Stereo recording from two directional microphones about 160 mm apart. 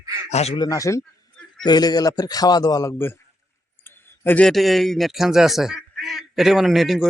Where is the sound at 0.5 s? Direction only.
25° left (ahead or behind).